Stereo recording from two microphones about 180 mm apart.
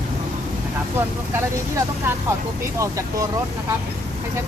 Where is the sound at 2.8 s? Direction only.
15° right (ahead or behind).